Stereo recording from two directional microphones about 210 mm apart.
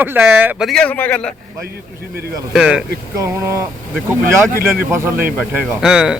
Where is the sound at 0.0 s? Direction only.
10° right (ahead or behind).